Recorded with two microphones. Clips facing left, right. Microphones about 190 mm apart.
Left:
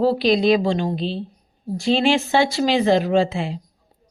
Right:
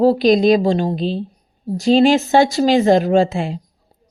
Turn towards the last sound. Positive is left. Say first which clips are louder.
# right 4 dB
turn(degrees=-45)  # may be behind; listen again after turning